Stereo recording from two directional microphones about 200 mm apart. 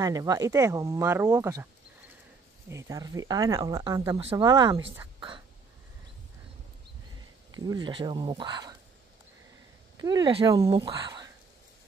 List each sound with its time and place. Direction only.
0.0 s speech: 20° right (ahead or behind)
7.5 s speech: 20° right (ahead or behind)
9.9 s speech: 20° right (ahead or behind)